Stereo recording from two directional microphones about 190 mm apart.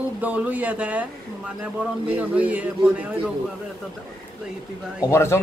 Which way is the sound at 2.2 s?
10° right (ahead or behind).